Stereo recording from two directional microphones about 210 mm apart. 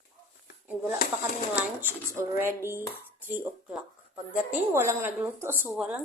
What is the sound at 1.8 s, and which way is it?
A woman's voice, 10° right (ahead or behind).